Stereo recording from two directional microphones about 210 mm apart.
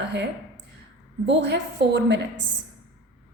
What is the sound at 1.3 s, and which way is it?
Speech, 55° right (ahead or behind).